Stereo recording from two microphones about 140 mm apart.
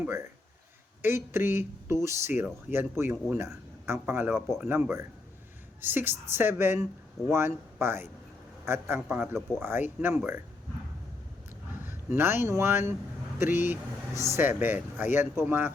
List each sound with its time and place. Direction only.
0.0 s speech: 20° right (ahead or behind)
11.9 s speech: 15° right (ahead or behind)